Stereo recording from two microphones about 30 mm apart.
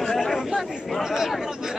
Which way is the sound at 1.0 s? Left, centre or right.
Centre.